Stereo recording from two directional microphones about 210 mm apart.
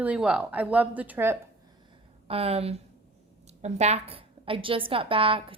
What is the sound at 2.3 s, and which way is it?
A woman's voice, 30° right (ahead or behind).